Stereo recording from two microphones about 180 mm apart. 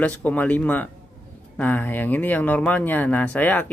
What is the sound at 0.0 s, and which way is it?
Speech, 10° left (ahead or behind).